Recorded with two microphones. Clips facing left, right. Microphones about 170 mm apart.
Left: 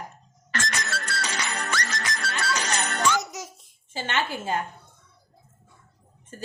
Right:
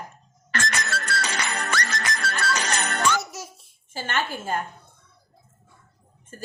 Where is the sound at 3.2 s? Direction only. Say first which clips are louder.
Even; 20° left (ahead or behind).